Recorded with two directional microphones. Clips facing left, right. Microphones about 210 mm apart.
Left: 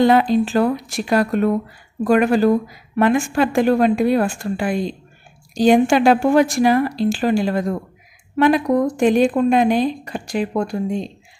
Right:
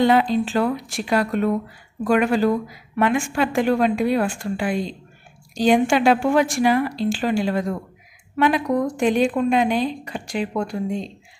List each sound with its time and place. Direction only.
0.0 s speech: 45° left (ahead or behind)